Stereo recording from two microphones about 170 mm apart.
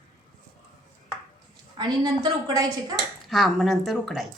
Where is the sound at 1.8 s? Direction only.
25° right (ahead or behind).